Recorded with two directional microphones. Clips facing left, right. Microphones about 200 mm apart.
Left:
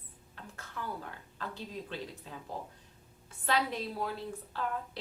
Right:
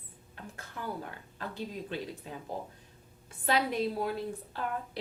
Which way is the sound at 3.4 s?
15° right (ahead or behind).